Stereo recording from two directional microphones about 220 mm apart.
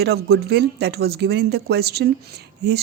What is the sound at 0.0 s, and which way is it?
Speech, 45° right (ahead or behind).